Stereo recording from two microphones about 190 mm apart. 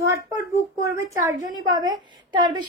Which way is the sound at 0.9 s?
20° right (ahead or behind).